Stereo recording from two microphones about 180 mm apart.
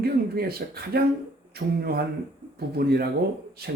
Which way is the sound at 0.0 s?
60° right (ahead or behind).